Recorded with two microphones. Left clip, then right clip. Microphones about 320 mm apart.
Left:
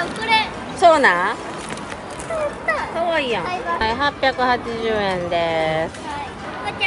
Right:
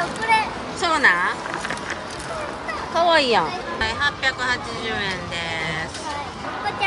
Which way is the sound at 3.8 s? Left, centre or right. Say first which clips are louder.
Left 2 dB; centre.